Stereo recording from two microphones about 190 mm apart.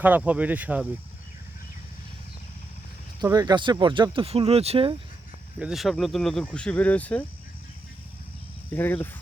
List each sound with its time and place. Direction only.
0.0 s speech: 10° right (ahead or behind)
3.2 s speech: 20° right (ahead or behind)
5.5 s speech: 5° right (ahead or behind)
8.7 s speech: 10° left (ahead or behind)